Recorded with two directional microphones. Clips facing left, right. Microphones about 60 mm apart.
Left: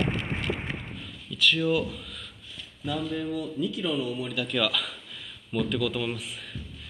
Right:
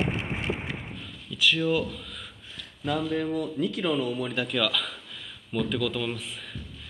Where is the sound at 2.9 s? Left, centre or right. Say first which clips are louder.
Right 3 dB; right.